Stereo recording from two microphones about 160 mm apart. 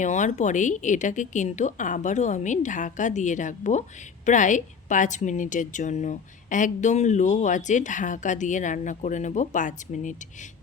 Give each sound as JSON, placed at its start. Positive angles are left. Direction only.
{"t": 0.0, "sound": "a woman's voice", "side_deg": 50}